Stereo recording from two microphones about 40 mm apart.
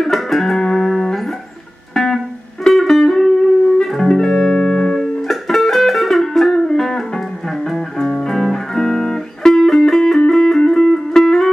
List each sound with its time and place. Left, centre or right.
0.0 s music: centre
8.0 s music: centre